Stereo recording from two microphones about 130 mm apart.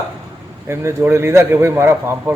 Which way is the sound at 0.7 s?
20° right (ahead or behind).